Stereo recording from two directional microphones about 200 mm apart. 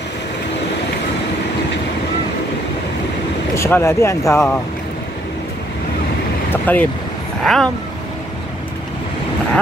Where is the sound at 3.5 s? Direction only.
15° left (ahead or behind).